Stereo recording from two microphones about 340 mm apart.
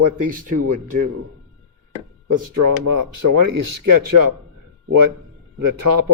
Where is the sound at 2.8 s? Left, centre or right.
Right.